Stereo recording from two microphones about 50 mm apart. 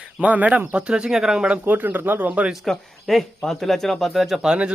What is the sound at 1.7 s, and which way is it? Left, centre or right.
Speech, right.